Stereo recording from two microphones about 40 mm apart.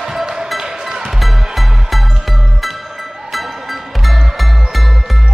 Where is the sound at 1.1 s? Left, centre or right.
Centre.